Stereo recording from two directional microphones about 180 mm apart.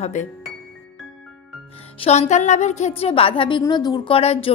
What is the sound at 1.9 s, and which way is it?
A woman's voice, 35° left (ahead or behind).